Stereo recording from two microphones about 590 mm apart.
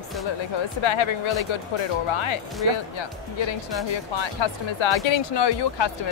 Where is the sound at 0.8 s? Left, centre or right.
Left.